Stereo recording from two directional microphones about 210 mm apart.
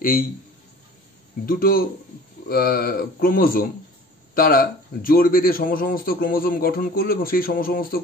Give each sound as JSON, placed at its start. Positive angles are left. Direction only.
{"t": 0.0, "sound": "a man's voice", "side_deg": 45}
{"t": 1.4, "sound": "a man's voice", "side_deg": 45}